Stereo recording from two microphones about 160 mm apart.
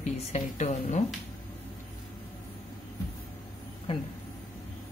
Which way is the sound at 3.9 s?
35° left (ahead or behind).